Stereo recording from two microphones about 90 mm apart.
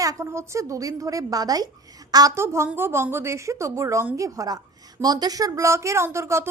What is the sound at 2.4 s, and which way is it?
A woman's voice, 30° right (ahead or behind).